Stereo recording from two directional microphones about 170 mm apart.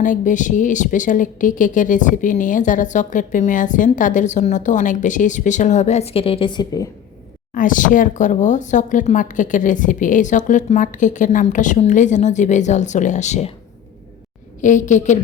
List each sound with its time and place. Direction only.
0.0 s a woman's voice: 50° left (ahead or behind); by 6.8 s 25° left (ahead or behind)
7.5 s a woman's voice: 50° left (ahead or behind)
14.6 s a woman's voice: 45° left (ahead or behind)